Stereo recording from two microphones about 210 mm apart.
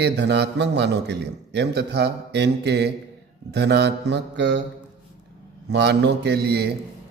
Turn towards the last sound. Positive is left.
turn(degrees=-50)  # may be behind; listen again after turning